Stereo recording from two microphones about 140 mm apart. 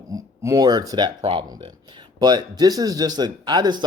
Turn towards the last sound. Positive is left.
turn(degrees=-30)  # may be behind; listen again after turning